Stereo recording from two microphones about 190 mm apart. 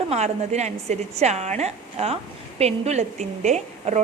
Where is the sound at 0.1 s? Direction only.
35° right (ahead or behind).